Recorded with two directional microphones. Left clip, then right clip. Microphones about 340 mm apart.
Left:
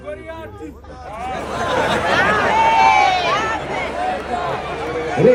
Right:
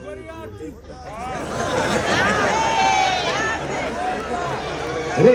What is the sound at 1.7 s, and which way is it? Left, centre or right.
Run, centre.